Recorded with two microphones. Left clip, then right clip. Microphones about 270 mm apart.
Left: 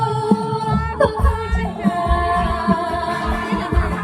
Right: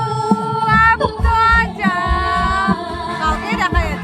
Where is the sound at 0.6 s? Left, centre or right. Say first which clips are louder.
Right 11 dB; centre.